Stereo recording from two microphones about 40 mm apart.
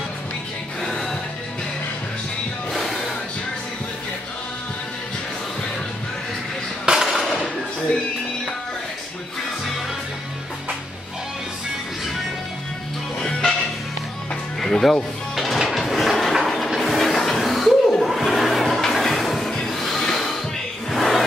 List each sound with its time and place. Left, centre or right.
0.8 s music: centre
2.7 s music: centre
7.1 s a sound: centre
13.2 s music: centre
14.6 s music: centre
15.9 s a sound: centre
18.8 s music: centre